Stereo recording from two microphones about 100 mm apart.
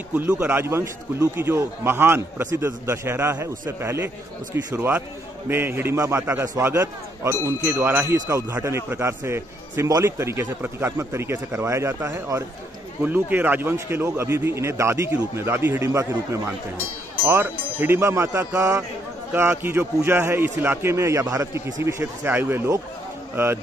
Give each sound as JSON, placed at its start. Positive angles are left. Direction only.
{"t": 0.1, "sound": "speech", "side_deg": -15}
{"t": 13.0, "sound": "speech", "side_deg": -15}
{"t": 17.3, "sound": "speech", "side_deg": -25}